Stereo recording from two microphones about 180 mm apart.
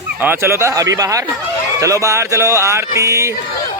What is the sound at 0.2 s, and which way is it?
Speech, 10° right (ahead or behind).